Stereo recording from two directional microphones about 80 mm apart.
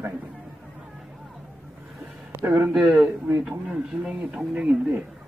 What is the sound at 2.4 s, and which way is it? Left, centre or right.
Speech, right.